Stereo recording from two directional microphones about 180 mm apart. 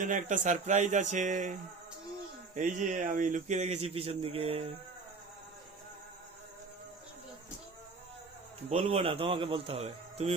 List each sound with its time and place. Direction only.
0.0 s speech: 45° right (ahead or behind)
2.6 s speech: 45° right (ahead or behind)
8.7 s speech: 35° right (ahead or behind)